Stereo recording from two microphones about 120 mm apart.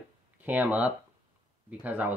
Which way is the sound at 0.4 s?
15° right (ahead or behind).